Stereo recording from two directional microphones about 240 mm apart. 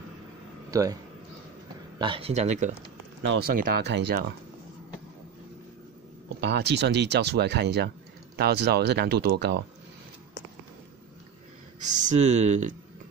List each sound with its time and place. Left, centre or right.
0.7 s a man's voice: centre
2.0 s speech: right
3.2 s speech: right
6.4 s speech: right
11.9 s speech: right